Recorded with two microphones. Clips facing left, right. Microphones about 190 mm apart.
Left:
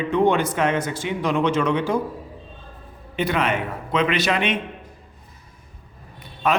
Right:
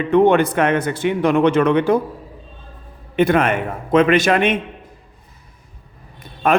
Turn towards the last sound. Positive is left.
turn(degrees=-50)  # may be behind; listen again after turning